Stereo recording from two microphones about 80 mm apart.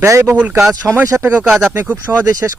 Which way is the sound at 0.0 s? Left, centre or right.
Right.